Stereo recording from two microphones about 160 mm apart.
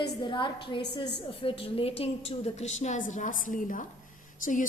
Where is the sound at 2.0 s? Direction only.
40° left (ahead or behind).